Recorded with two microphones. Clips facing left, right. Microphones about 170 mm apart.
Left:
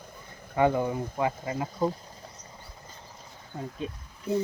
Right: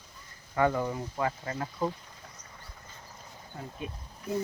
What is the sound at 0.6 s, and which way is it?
Speech, 20° left (ahead or behind).